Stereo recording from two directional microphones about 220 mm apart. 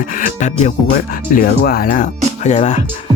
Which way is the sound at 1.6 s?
45° left (ahead or behind).